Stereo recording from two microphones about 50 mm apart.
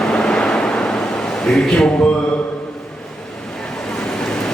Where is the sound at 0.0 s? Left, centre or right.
Centre.